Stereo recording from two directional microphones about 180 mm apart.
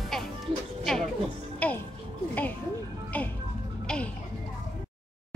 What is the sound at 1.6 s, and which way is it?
Music, 10° left (ahead or behind).